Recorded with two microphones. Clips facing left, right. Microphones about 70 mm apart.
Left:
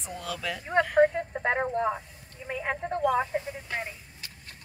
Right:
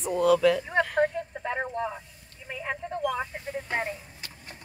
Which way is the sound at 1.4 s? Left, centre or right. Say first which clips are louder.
Left 4 dB; left.